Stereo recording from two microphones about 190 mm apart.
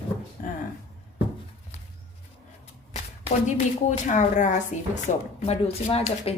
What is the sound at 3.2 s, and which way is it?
A woman's voice, 40° left (ahead or behind).